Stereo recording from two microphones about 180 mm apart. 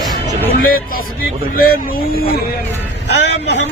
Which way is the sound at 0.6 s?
55° left (ahead or behind).